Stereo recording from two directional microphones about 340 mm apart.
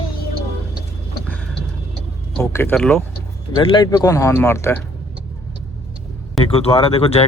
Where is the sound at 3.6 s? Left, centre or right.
Centre.